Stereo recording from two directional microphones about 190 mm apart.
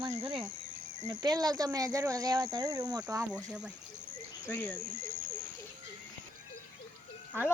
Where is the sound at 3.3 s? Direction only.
5° right (ahead or behind).